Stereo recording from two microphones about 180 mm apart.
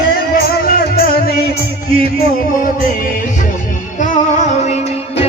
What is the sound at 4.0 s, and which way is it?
Music, 40° left (ahead or behind).